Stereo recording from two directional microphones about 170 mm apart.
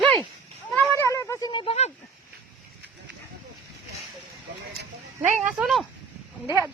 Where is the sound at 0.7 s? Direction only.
15° left (ahead or behind).